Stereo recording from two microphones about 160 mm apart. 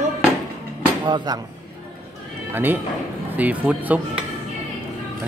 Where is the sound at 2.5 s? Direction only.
10° right (ahead or behind).